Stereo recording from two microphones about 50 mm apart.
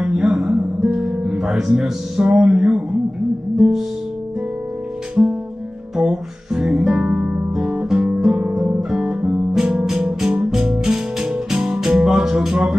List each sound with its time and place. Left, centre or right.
0.0 s music: centre
5.9 s music: centre
8.9 s guitar: centre
9.5 s music: centre